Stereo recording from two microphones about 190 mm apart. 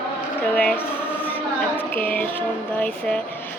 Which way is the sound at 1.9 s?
10° left (ahead or behind).